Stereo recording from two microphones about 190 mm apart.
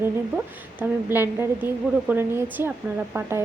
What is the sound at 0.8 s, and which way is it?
Speech, 10° right (ahead or behind).